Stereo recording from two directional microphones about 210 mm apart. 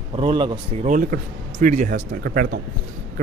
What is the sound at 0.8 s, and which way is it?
Speech, 40° right (ahead or behind).